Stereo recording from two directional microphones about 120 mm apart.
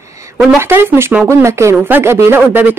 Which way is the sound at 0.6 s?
20° right (ahead or behind).